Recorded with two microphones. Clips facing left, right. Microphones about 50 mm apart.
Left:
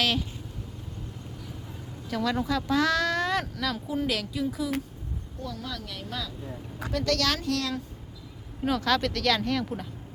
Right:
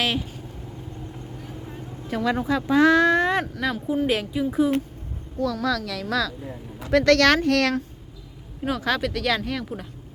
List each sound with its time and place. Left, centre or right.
0.0 s speech: centre
1.6 s speech: right
5.4 s speech: right
6.9 s speech: right
8.6 s speech: centre